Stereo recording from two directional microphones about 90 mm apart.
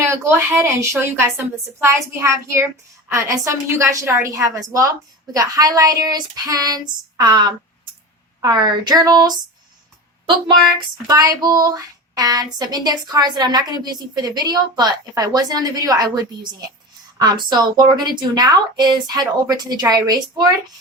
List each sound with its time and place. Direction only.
0.6 s a woman's voice: 30° right (ahead or behind); by 9.4 s 50° right (ahead or behind)
11.0 s speech: 45° right (ahead or behind)